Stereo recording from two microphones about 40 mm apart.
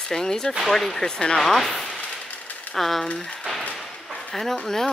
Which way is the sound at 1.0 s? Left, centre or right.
Left.